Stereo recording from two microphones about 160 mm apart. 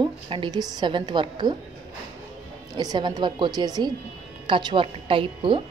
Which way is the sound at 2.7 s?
30° right (ahead or behind).